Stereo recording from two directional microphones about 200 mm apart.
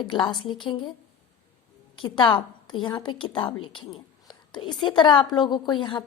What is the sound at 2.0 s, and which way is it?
A woman's voice, 25° left (ahead or behind).